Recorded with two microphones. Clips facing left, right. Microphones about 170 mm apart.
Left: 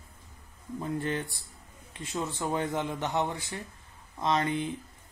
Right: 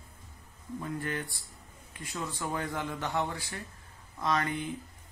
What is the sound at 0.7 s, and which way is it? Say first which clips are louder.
Speech: left 4 dB; 25° left (ahead or behind).